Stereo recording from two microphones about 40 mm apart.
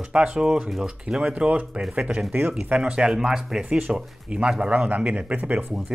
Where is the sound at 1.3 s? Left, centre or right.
Right; by 3.6 s centre.